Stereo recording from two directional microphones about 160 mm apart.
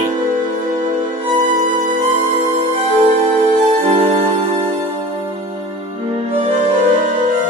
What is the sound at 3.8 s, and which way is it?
Music, 45° right (ahead or behind).